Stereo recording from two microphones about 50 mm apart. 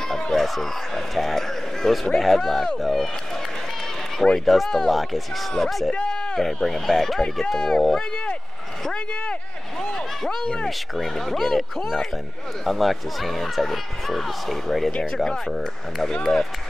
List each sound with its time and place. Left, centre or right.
0.1 s speech: centre
4.2 s a man's voice: centre
4.6 s speech: centre
8.8 s speech: centre
9.9 s a man's voice: centre
11.0 s speech: centre
16.1 s a man's voice: centre